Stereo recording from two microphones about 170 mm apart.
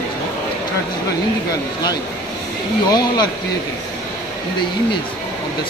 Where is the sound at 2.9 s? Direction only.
25° left (ahead or behind).